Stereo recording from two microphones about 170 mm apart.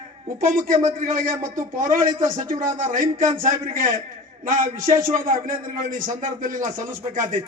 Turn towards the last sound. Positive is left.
turn(degrees=-50)  # may be behind; listen again after turning